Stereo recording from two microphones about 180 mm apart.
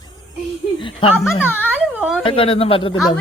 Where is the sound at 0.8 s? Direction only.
30° left (ahead or behind).